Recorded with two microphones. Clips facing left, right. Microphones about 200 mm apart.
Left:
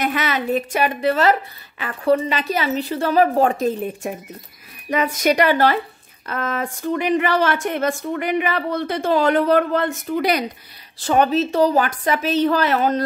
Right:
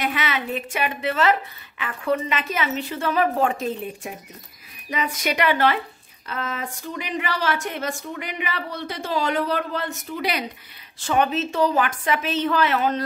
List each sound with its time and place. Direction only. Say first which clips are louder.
0.0 s a woman's voice: left 4 dB; 45° left (ahead or behind)
6.2 s a woman's voice: left 5 dB; 50° left (ahead or behind)
11.0 s a woman's voice: left 5 dB; 35° left (ahead or behind)